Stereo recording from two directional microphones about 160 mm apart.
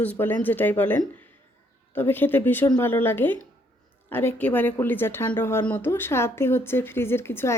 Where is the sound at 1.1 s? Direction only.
10° left (ahead or behind).